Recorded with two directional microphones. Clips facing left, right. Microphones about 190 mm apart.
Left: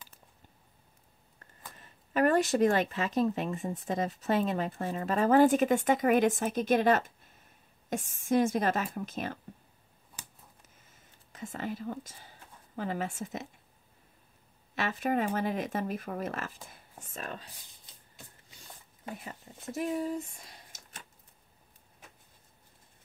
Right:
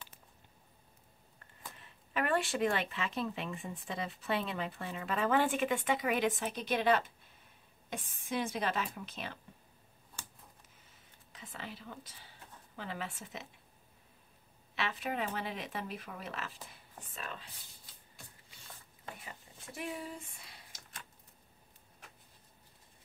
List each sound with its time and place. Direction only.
1.8 s speech: 40° left (ahead or behind)
11.3 s speech: 45° left (ahead or behind)
14.8 s speech: 45° left (ahead or behind)
19.2 s speech: 40° left (ahead or behind)